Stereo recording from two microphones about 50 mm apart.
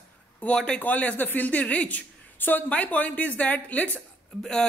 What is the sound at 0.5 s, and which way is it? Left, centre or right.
Speech, centre.